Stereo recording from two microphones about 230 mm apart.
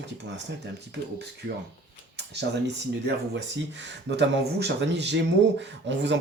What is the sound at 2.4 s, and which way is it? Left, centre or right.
Speech, right.